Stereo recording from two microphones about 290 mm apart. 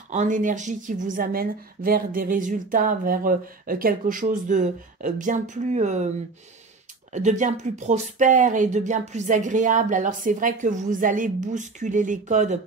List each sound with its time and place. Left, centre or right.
0.1 s a woman's voice: right
7.1 s a woman's voice: right